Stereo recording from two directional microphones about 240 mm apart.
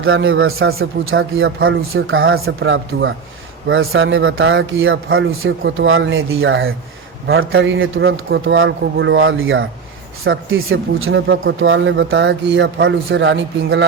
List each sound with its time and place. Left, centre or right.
0.0 s a man's voice: right